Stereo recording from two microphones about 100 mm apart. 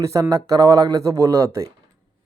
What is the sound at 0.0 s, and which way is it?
Speech, 30° right (ahead or behind).